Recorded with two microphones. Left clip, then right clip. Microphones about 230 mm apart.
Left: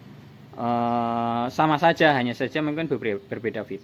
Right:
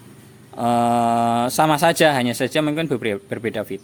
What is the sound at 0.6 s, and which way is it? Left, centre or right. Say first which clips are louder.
Speech: right 6 dB; right.